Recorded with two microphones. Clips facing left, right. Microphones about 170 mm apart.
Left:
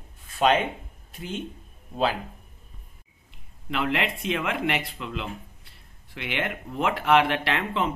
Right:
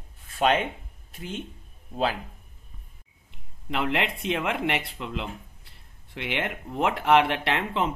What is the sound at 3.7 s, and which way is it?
Speech, 25° right (ahead or behind).